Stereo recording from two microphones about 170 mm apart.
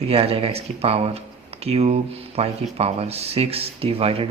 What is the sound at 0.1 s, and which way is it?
Speech, 35° right (ahead or behind).